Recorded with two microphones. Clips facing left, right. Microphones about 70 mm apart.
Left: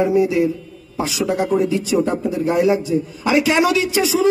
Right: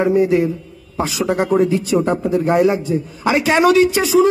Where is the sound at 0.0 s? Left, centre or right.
Right.